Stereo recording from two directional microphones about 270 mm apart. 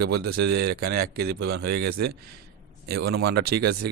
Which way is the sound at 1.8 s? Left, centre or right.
Right.